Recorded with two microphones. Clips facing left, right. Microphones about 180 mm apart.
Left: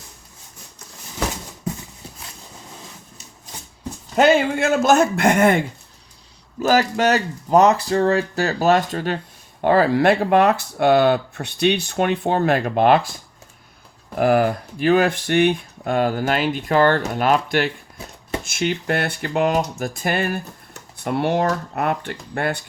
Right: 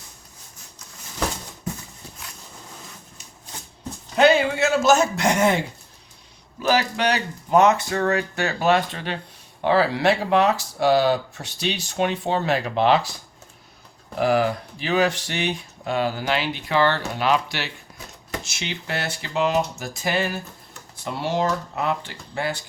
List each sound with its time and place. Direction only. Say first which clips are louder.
4.1 s speech: left 2 dB; 50° left (ahead or behind)
6.6 s speech: left 4 dB; 45° left (ahead or behind)
14.2 s speech: left 3 dB; 50° left (ahead or behind)